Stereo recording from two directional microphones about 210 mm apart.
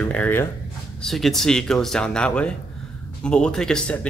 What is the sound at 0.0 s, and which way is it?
Speech, 5° left (ahead or behind).